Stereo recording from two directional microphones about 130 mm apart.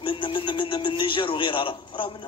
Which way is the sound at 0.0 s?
40° left (ahead or behind).